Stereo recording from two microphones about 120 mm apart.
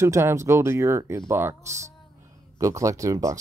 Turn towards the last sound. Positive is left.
turn(degrees=-25)  # may be behind; listen again after turning